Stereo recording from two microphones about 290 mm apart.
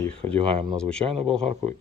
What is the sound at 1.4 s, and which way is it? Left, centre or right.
Speech, right.